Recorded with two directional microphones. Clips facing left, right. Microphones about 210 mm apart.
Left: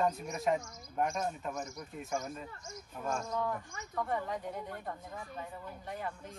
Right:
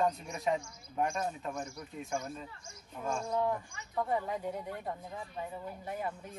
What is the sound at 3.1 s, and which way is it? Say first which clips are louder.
Speech: right 1 dB; 30° right (ahead or behind).